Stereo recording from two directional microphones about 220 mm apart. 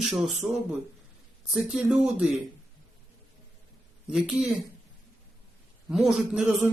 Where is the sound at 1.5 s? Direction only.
5° right (ahead or behind).